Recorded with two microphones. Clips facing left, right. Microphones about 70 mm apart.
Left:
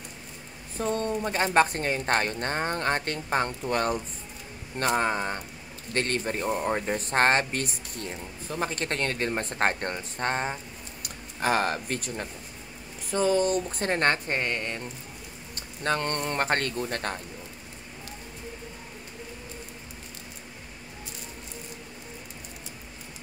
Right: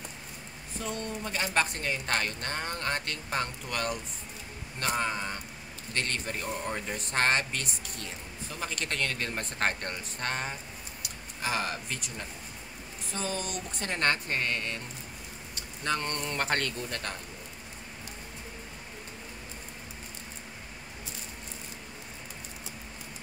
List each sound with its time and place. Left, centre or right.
0.7 s speech: left
11.0 s speech: left
13.7 s a woman's voice: left
15.8 s speech: left